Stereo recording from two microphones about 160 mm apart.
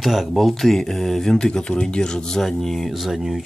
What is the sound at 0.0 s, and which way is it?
Speech, centre (ahead or behind).